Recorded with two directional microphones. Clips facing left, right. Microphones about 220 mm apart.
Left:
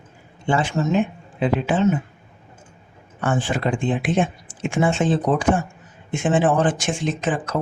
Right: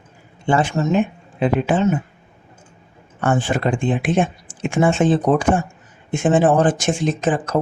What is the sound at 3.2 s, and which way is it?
Speech, 50° right (ahead or behind).